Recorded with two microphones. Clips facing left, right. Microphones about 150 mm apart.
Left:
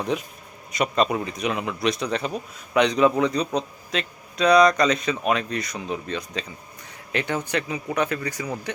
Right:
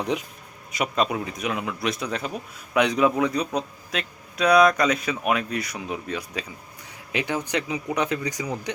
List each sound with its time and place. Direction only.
0.7 s speech: 5° right (ahead or behind)